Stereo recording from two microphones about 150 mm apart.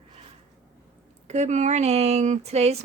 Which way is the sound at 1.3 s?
50° right (ahead or behind).